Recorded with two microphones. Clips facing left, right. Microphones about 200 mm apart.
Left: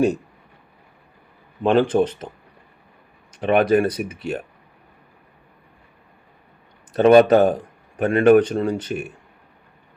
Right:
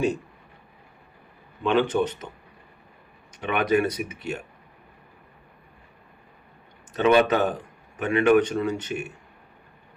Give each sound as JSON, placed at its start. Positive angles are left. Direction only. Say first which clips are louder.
{"t": 1.6, "sound": "a man's voice", "louder": "left 5 dB", "side_deg": 40}
{"t": 3.4, "sound": "a man's voice", "louder": "left 6 dB", "side_deg": 40}
{"t": 6.9, "sound": "a man's voice", "louder": "left 7 dB", "side_deg": 40}